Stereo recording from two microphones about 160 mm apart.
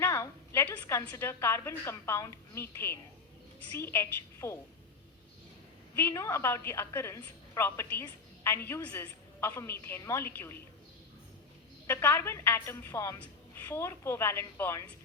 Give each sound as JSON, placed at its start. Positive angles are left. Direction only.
{"t": 0.0, "sound": "a woman's voice", "side_deg": 15}
{"t": 6.0, "sound": "a woman's voice", "side_deg": 15}
{"t": 11.9, "sound": "a woman's voice", "side_deg": 15}